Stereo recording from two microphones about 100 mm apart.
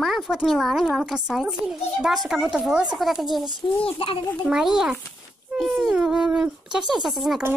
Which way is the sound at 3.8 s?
65° left (ahead or behind).